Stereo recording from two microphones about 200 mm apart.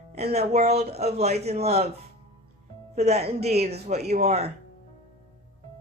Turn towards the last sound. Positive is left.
turn(degrees=-30)  # may be behind; listen again after turning